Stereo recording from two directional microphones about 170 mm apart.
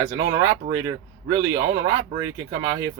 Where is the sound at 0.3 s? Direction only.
20° right (ahead or behind).